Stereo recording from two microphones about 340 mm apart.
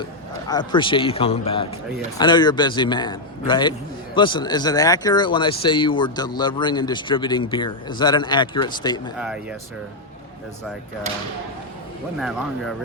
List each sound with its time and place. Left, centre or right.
0.0 s a sound: centre
0.6 s a man's voice: centre
9.1 s speech: centre